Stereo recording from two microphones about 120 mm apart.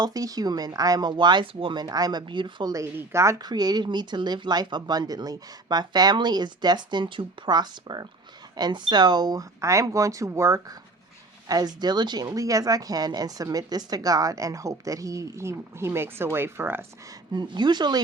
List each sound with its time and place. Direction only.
0.0 s speech: 30° right (ahead or behind)
3.1 s speech: 25° right (ahead or behind)
17.3 s speech: 40° right (ahead or behind)